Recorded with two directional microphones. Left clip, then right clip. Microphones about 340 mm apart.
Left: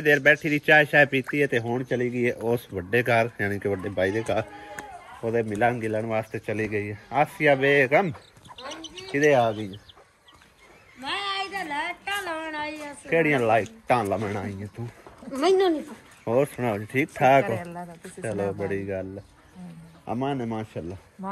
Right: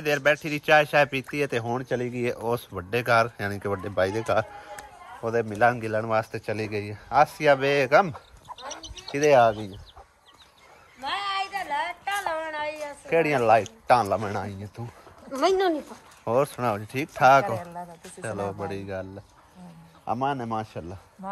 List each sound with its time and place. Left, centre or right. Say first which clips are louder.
0.0 s speech: left 4 dB; centre
11.0 s a sound: right 1 dB; right
13.1 s speech: right 1 dB; centre
20.1 s speech: right 2 dB; centre